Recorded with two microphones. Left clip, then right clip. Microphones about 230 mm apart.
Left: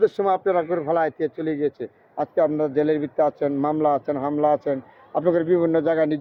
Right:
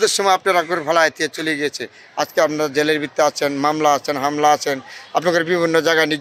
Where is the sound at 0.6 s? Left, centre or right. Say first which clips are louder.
Right 3 dB; right.